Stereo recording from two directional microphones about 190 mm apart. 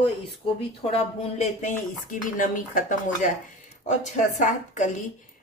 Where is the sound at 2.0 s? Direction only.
45° left (ahead or behind).